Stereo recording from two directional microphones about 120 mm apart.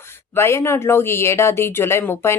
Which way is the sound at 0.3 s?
20° left (ahead or behind).